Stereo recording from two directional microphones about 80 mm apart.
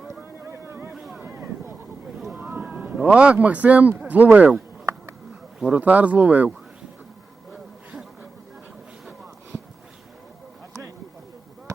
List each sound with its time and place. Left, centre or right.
0.2 s boat: right
1.2 s a sound: right
2.3 s a man's voice: right